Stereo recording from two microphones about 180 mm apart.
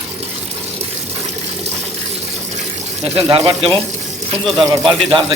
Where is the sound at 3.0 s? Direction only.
35° right (ahead or behind).